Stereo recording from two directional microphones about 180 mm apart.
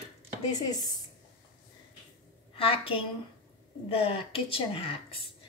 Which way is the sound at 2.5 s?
30° left (ahead or behind).